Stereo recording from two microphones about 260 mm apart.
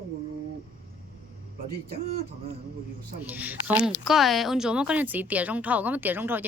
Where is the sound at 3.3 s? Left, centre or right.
Centre.